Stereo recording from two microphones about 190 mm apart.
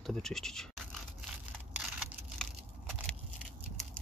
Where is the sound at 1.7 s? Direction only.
5° right (ahead or behind).